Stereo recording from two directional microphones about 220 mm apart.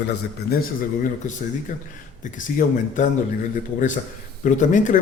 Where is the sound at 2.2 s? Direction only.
35° left (ahead or behind).